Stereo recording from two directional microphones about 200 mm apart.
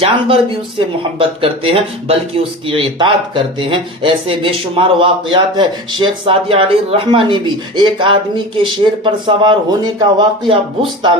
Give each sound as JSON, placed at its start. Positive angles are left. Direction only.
{"t": 0.0, "sound": "speech", "side_deg": -25}